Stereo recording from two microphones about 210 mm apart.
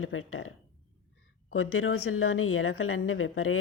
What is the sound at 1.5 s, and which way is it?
A woman's voice, 75° left (ahead or behind).